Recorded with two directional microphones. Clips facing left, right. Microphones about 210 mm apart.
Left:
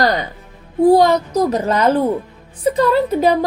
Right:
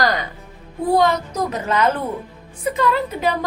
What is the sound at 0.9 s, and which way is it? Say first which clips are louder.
A woman's voice: left 5 dB; 35° left (ahead or behind).